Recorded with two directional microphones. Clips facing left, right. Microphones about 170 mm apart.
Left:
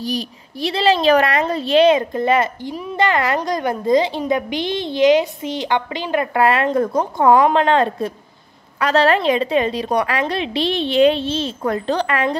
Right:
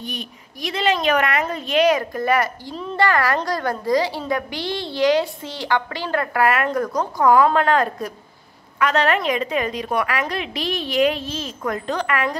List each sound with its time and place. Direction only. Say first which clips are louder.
0.0 s a woman's voice: left 8 dB; 35° left (ahead or behind)
2.7 s a woman's voice: even; 10° left (ahead or behind); by 12.4 s 30° left (ahead or behind)